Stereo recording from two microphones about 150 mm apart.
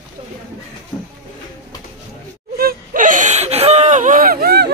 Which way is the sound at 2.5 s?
75° right (ahead or behind).